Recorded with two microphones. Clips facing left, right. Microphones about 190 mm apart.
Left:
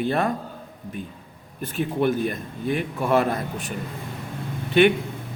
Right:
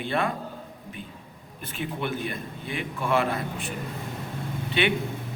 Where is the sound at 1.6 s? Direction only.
40° left (ahead or behind).